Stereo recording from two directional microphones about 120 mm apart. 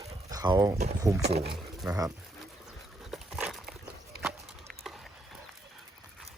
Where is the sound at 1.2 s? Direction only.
60° right (ahead or behind).